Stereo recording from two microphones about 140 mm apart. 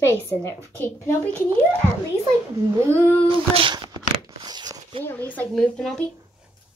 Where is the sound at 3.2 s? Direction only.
40° right (ahead or behind).